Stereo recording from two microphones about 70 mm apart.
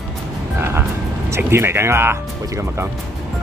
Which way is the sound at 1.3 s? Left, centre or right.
Right.